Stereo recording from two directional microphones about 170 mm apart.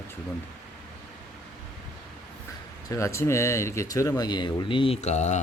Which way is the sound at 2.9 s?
15° left (ahead or behind).